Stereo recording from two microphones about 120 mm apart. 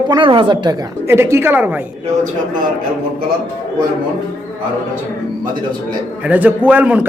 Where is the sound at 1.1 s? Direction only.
20° right (ahead or behind).